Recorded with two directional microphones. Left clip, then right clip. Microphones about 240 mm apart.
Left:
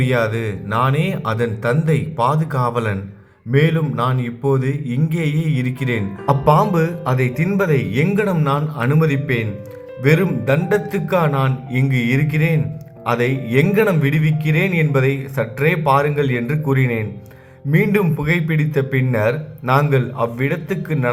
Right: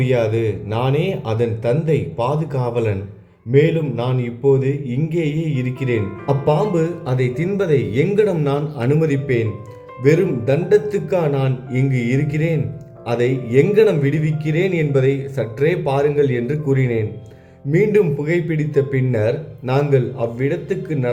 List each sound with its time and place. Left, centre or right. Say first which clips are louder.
0.0 s a man's voice: right 1 dB; centre